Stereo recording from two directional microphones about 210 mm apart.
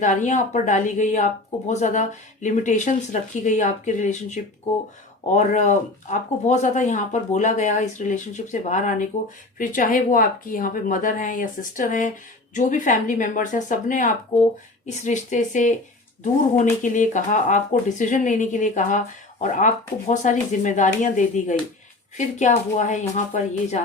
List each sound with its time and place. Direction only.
0.0 s speech: 35° left (ahead or behind)
16.8 s speech: 35° left (ahead or behind)